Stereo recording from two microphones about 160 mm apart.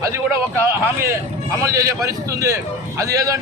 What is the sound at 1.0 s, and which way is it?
A man's voice, 20° right (ahead or behind).